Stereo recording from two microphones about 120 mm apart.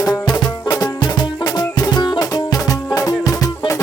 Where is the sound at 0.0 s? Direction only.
35° left (ahead or behind).